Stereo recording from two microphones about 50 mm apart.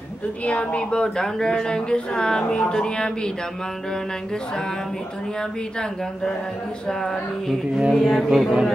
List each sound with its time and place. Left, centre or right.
0.5 s speech: left
6.9 s speech: centre
7.9 s a sound: centre